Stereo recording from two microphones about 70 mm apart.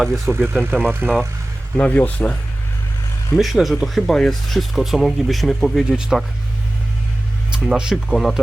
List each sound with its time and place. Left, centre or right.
0.3 s speech: right
1.7 s speech: centre
3.3 s speech: centre
7.5 s speech: centre